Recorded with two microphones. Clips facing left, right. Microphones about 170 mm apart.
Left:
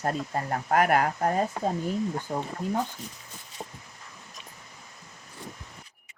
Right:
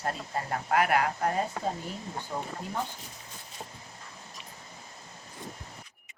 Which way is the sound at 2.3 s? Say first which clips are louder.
Left 4 dB; 40° left (ahead or behind).